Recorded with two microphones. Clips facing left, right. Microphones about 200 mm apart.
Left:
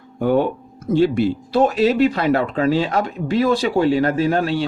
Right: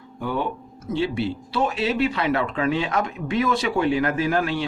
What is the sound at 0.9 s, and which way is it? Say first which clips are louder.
Speech: left 8 dB; 45° left (ahead or behind).